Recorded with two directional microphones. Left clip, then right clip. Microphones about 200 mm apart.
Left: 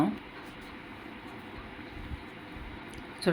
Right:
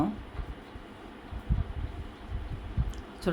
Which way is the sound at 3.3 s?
5° right (ahead or behind).